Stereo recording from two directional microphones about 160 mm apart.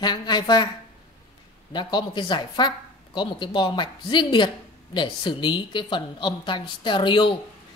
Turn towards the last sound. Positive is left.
turn(degrees=30)  # may be behind; listen again after turning